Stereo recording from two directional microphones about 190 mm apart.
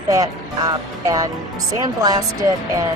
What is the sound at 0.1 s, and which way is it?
Speech, 20° right (ahead or behind).